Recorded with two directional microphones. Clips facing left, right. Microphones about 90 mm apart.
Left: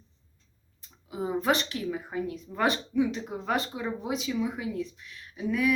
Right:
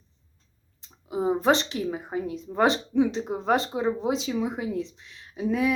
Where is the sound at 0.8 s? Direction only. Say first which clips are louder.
Right 6 dB; 30° right (ahead or behind).